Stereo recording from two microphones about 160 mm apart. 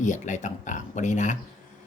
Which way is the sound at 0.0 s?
50° left (ahead or behind).